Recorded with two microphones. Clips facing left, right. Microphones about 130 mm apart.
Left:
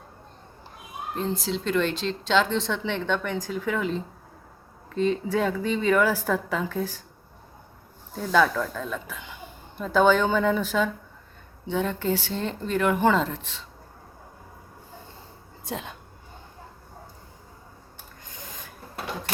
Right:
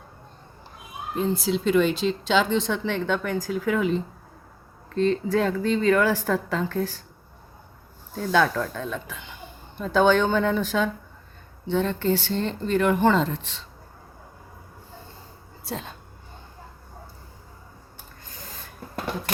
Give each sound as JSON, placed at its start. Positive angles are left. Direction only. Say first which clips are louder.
{"t": 1.1, "sound": "speech", "louder": "right 4 dB", "side_deg": -5}
{"t": 4.9, "sound": "a woman's voice", "louder": "right 2 dB", "side_deg": 10}
{"t": 8.1, "sound": "speech", "louder": "even", "side_deg": 0}
{"t": 15.6, "sound": "speech", "louder": "even", "side_deg": 15}
{"t": 18.3, "sound": "rub", "louder": "even", "side_deg": 20}